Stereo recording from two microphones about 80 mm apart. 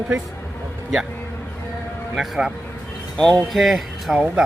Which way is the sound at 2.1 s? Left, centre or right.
Centre.